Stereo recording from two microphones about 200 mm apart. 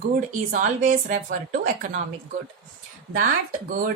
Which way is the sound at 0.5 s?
40° right (ahead or behind).